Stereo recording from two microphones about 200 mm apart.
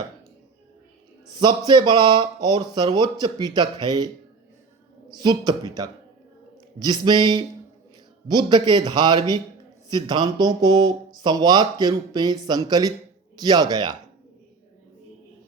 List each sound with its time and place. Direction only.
1.3 s speech: 20° right (ahead or behind)
5.1 s speech: 20° right (ahead or behind)